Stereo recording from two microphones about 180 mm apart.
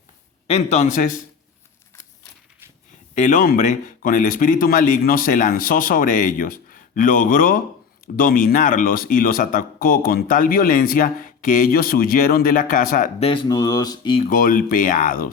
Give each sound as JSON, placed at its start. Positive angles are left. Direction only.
{"t": 0.4, "sound": "a man's voice", "side_deg": 35}
{"t": 3.2, "sound": "speech", "side_deg": 45}
{"t": 13.1, "sound": "speech", "side_deg": 30}
{"t": 14.3, "sound": "speech", "side_deg": 50}